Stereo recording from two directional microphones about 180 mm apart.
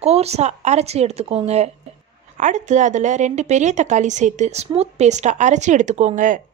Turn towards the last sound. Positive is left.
turn(degrees=-45)  # may be behind; listen again after turning